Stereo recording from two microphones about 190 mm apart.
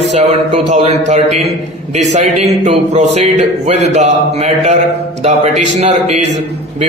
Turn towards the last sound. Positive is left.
turn(degrees=-40)  # may be behind; listen again after turning